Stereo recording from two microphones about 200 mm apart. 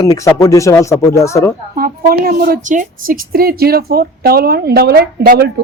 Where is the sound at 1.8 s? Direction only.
50° right (ahead or behind).